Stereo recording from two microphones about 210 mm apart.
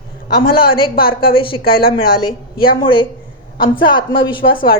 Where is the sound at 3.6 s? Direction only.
20° left (ahead or behind).